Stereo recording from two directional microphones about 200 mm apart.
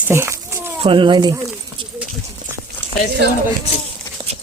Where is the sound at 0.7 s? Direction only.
25° right (ahead or behind).